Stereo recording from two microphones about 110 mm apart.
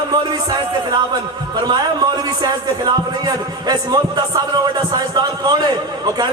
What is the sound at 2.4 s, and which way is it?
Speech, 40° right (ahead or behind).